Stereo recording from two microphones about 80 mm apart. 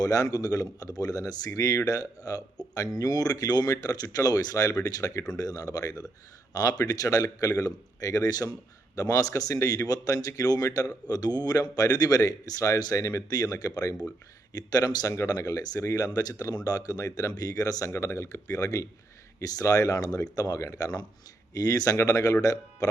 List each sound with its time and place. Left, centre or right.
0.0 s a man's voice: left
17.9 s a man's voice: left